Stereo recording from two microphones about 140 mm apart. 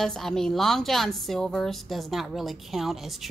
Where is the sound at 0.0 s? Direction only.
5° left (ahead or behind).